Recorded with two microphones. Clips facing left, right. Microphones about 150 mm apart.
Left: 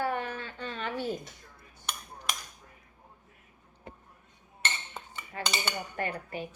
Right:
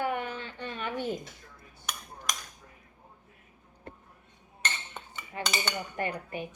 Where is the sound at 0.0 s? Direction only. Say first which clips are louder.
Even; 15° right (ahead or behind).